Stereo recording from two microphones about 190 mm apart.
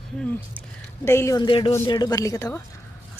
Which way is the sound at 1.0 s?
15° left (ahead or behind).